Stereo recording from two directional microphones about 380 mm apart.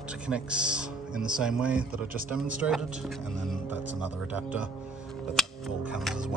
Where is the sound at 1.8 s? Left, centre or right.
Right.